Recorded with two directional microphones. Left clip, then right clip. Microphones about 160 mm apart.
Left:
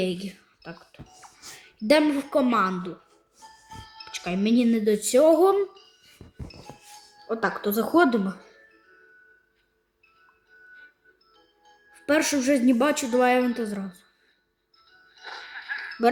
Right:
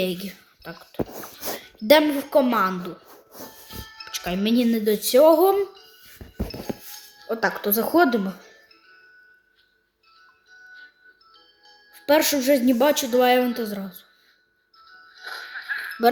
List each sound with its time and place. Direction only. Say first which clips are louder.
0.0 s speech: right 2 dB; centre (ahead or behind)
0.7 s speech: right 13 dB; 55° right (ahead or behind)
1.9 s speech: right 4 dB; centre (ahead or behind)
3.3 s music: right 4 dB; 55° right (ahead or behind)
4.0 s speech: right 2 dB; 5° left (ahead or behind)
6.5 s music: right 12 dB; 50° right (ahead or behind)
7.3 s speech: right 2 dB; 10° left (ahead or behind)
11.3 s music: right 5 dB; 45° right (ahead or behind)
12.0 s speech: right 4 dB; 5° left (ahead or behind)
14.8 s music: right 4 dB; 55° right (ahead or behind)